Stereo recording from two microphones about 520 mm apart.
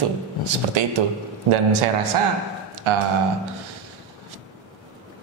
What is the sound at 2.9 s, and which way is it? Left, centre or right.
Speech, right.